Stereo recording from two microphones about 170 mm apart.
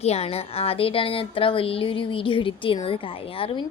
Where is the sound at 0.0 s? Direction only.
40° left (ahead or behind).